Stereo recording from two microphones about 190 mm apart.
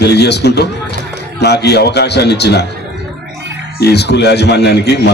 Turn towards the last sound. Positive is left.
turn(degrees=60)  # may be behind; listen again after turning